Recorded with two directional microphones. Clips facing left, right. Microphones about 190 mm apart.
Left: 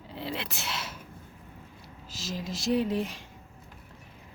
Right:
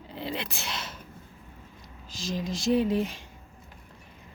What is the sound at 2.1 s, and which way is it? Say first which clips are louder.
Speech: right 4 dB; 5° left (ahead or behind).